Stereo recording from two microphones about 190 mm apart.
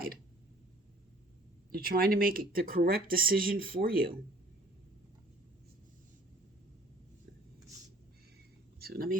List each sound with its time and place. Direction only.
1.7 s speech: 50° right (ahead or behind)
8.8 s speech: 50° right (ahead or behind)